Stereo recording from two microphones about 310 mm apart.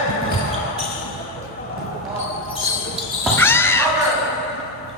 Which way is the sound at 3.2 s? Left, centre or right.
Centre.